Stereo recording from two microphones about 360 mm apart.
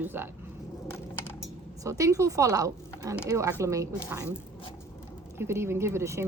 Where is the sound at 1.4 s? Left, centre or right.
Centre.